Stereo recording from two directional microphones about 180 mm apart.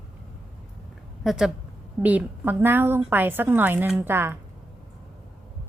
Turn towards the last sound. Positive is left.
turn(degrees=-10)  # may be behind; listen again after turning